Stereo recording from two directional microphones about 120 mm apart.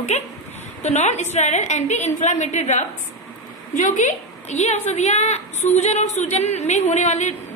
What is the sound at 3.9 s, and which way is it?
A woman's voice, 85° left.